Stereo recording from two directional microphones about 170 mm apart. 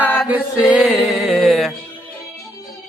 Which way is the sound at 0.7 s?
5° right (ahead or behind).